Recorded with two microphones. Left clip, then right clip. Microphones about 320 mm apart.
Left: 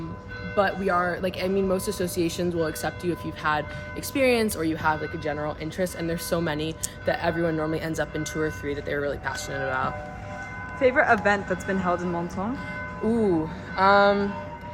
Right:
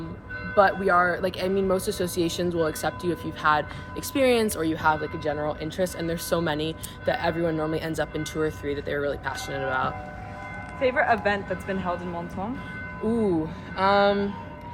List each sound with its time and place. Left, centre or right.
0.5 s speech: centre
10.8 s speech: left
13.1 s speech: centre